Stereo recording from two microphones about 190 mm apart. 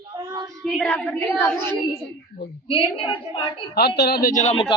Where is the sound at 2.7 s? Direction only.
30° left (ahead or behind).